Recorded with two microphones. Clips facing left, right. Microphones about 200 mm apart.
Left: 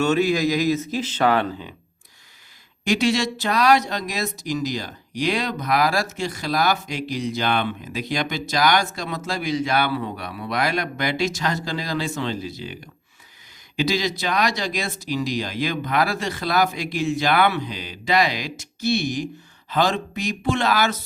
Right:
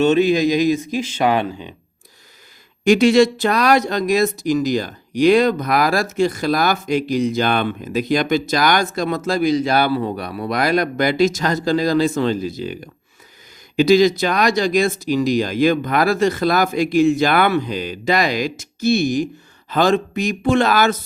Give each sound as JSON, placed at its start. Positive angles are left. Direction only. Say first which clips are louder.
{"t": 0.0, "sound": "speech", "louder": "right 5 dB", "side_deg": -20}
{"t": 2.9, "sound": "speech", "louder": "right 8 dB", "side_deg": -55}